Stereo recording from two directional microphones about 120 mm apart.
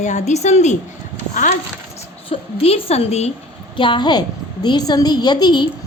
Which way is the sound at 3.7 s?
45° left (ahead or behind).